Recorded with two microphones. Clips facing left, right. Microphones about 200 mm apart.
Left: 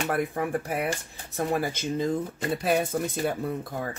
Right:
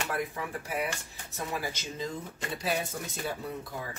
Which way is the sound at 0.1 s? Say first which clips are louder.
Left 7 dB; 55° left (ahead or behind).